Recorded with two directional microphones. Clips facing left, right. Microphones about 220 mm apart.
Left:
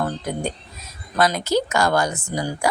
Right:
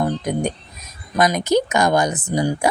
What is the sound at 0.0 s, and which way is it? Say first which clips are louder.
Speech: right 4 dB; 15° right (ahead or behind).